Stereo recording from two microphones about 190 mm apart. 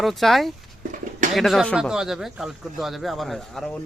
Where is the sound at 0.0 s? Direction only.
Centre (ahead or behind).